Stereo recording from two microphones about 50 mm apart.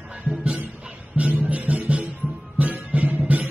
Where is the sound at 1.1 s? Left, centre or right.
Right.